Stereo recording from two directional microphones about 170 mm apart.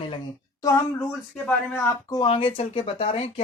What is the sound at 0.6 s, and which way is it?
Speech, 20° left (ahead or behind).